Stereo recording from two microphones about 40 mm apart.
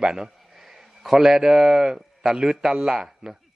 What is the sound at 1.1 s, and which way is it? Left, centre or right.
A man's voice, centre.